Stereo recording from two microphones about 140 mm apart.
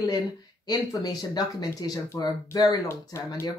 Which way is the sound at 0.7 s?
25° left (ahead or behind).